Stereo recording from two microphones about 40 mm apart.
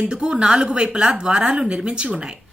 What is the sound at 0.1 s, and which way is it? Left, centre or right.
A woman's voice, right.